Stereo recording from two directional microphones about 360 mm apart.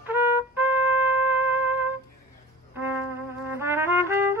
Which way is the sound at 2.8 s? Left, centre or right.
Centre.